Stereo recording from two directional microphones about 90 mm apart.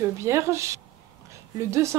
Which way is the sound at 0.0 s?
30° right (ahead or behind).